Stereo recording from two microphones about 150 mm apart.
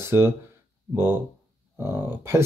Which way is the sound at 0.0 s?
15° right (ahead or behind).